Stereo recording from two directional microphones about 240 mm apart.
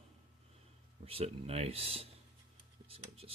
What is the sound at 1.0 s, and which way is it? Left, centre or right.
Speech, right.